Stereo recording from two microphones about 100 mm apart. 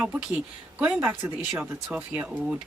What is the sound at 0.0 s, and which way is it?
Speech, 15° right (ahead or behind).